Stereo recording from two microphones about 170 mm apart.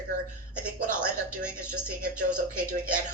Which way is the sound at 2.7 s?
50° right (ahead or behind).